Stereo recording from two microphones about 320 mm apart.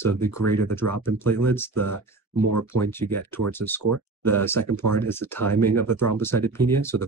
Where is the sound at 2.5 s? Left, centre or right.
Right.